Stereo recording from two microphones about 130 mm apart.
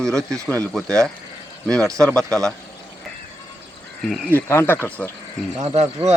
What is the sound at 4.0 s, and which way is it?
Speech, centre (ahead or behind).